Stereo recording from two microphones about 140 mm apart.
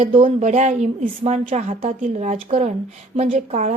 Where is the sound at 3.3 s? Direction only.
60° right (ahead or behind).